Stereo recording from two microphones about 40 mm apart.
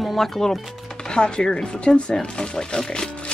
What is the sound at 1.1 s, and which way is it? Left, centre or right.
Speech, left.